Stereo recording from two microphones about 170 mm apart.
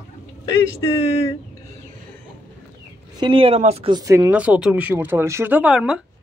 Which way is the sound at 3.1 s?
30° right (ahead or behind).